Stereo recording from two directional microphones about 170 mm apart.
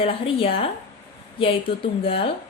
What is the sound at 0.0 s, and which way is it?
A woman's voice, 30° left (ahead or behind).